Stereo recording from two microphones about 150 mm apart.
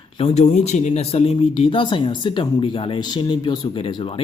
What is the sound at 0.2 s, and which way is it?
Speech, 45° left (ahead or behind).